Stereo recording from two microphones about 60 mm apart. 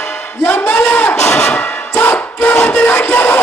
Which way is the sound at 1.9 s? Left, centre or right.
Left.